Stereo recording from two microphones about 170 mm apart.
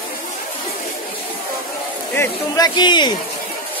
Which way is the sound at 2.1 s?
15° left (ahead or behind).